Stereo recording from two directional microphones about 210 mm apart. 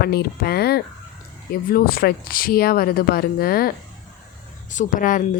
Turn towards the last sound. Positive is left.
turn(degrees=40)  # may be behind; listen again after turning